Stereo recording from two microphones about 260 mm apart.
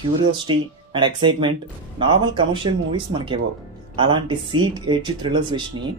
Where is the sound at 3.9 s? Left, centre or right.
Centre.